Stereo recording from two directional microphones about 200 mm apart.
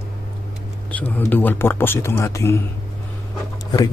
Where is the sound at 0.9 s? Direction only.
10° left (ahead or behind).